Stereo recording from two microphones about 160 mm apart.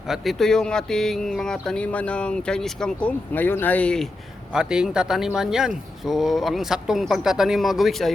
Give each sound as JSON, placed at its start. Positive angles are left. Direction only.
{"t": 0.1, "sound": "speech", "side_deg": 0}
{"t": 4.5, "sound": "speech", "side_deg": -5}